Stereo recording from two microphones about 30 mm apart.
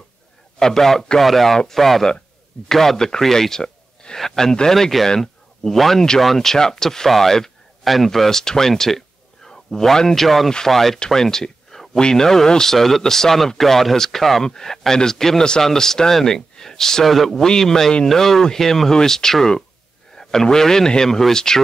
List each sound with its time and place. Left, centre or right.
0.6 s speech: centre
7.8 s a man's voice: centre
11.1 s a sound: centre
12.0 s speech: left
12.7 s speech: centre
17.0 s a man's voice: centre
17.5 s speech: centre
20.2 s a sound: centre
20.4 s speech: centre